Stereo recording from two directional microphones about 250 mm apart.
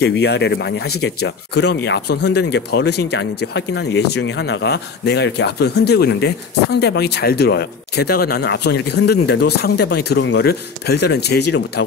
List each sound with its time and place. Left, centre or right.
0.0 s speech: left